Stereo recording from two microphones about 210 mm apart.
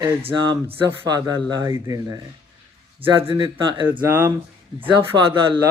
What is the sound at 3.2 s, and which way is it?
Speech, 25° right (ahead or behind).